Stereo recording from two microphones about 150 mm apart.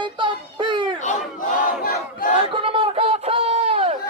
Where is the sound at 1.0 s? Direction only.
70° left (ahead or behind).